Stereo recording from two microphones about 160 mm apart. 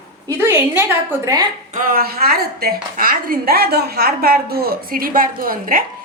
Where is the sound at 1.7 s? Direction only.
65° right (ahead or behind).